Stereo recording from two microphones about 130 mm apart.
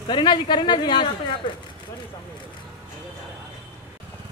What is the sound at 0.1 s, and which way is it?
A man's voice, 35° left (ahead or behind).